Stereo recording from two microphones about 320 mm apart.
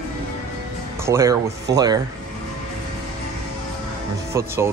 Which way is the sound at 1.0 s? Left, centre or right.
Centre.